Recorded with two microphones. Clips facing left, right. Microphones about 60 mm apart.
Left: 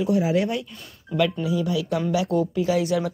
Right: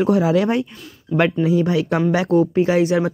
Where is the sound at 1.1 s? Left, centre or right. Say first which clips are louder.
Right 4 dB; centre.